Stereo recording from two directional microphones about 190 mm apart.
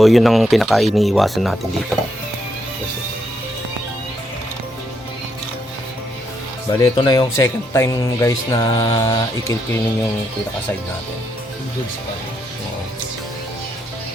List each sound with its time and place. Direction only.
0.0 s speech: centre (ahead or behind)
6.7 s speech: 20° left (ahead or behind)